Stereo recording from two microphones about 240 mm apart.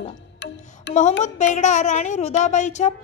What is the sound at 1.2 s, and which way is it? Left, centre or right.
A child's voice, left.